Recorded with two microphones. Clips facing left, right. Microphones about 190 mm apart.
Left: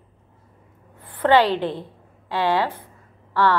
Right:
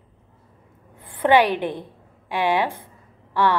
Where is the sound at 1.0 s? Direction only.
15° right (ahead or behind).